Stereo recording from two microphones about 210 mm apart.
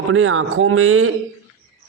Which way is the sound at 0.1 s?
70° right (ahead or behind).